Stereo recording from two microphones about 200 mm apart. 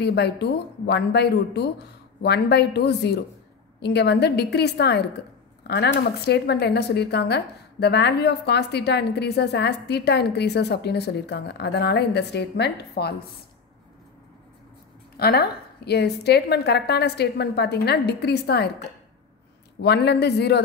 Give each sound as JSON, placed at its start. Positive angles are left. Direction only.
{"t": 0.0, "sound": "speech", "side_deg": 55}
{"t": 15.1, "sound": "speech", "side_deg": 50}
{"t": 19.8, "sound": "speech", "side_deg": 55}